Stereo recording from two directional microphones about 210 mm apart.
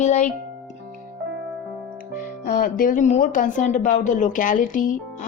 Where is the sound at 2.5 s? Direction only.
40° left (ahead or behind).